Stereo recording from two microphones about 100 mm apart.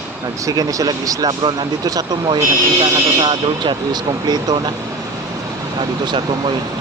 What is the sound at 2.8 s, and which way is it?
Speech, 60° right (ahead or behind).